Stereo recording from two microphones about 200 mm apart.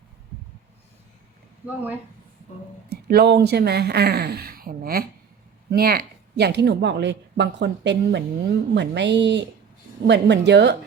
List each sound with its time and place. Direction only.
1.6 s speech: 10° right (ahead or behind)
2.9 s speech: 55° right (ahead or behind)